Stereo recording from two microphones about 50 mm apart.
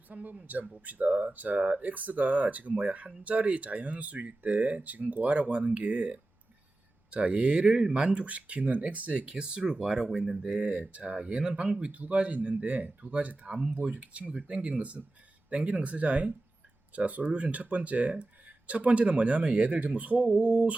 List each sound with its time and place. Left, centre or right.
0.1 s speech: right; by 10.3 s centre
10.3 s speech: right